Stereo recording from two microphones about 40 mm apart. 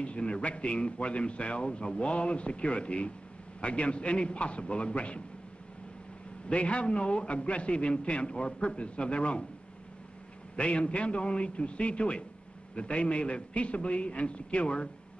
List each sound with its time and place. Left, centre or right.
0.0 s a man's voice: left
6.5 s a man's voice: left
10.5 s a man's voice: left